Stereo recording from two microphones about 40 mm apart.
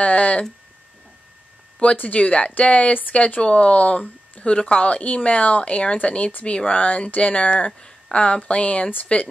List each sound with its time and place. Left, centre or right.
0.0 s speech: left
1.8 s speech: left
2.9 s speech: left
3.3 s speech: left